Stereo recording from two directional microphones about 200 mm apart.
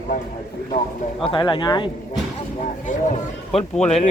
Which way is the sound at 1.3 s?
20° left (ahead or behind).